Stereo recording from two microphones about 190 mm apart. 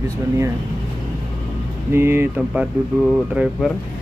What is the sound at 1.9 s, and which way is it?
Speech, 10° right (ahead or behind).